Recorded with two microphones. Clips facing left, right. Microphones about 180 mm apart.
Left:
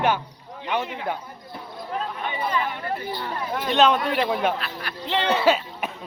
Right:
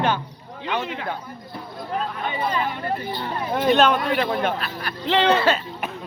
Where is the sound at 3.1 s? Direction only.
25° right (ahead or behind).